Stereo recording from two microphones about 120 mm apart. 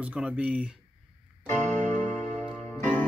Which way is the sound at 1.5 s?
10° left (ahead or behind).